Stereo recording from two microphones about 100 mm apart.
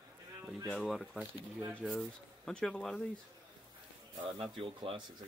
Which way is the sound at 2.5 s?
10° left (ahead or behind).